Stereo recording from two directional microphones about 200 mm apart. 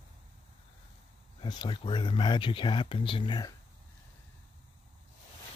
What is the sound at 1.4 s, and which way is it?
Speech, 25° left (ahead or behind).